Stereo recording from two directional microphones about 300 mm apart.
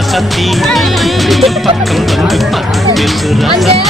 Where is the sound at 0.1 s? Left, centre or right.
Centre.